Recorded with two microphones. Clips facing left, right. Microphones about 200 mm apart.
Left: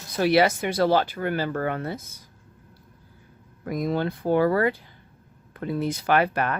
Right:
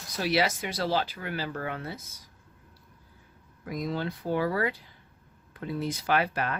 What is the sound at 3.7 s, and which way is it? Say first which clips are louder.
Speech: left 6 dB; 50° left (ahead or behind).